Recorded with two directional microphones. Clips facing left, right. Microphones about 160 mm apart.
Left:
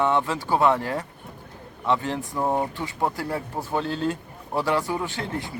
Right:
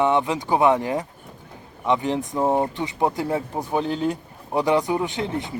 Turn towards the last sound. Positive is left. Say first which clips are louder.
# right 4 dB
turn(degrees=-20)  # may be behind; listen again after turning